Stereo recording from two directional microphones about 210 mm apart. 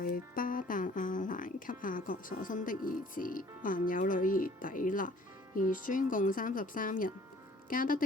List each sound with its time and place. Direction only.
0.0 s speech: 40° left (ahead or behind)